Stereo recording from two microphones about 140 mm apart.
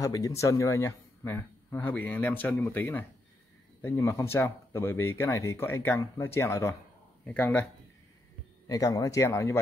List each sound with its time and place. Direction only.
0.0 s a man's voice: 25° left (ahead or behind)
8.6 s speech: 25° left (ahead or behind)